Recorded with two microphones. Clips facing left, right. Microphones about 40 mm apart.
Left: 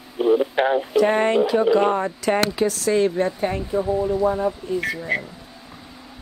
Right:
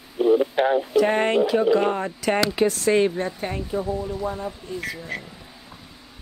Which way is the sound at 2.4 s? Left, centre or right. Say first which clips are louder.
Even; right.